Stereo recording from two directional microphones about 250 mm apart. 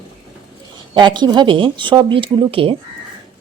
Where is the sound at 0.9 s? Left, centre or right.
Centre.